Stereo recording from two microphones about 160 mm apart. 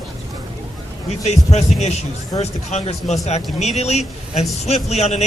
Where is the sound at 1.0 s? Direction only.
45° left (ahead or behind).